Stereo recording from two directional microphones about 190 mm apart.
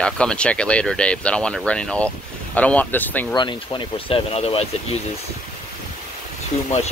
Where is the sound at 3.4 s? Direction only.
25° left (ahead or behind).